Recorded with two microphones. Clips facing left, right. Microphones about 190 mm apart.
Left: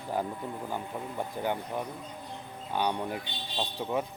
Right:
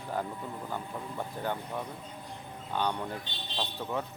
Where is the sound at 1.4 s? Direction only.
15° left (ahead or behind).